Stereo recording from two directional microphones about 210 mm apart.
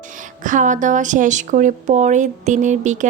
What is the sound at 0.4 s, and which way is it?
A woman's voice, 40° right (ahead or behind).